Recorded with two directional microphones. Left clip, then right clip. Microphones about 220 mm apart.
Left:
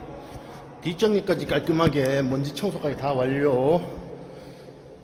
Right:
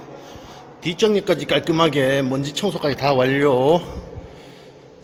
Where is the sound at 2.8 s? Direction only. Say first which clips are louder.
Right 7 dB; 30° right (ahead or behind).